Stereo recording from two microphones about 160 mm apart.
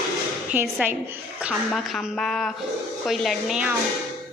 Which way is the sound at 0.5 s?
15° right (ahead or behind).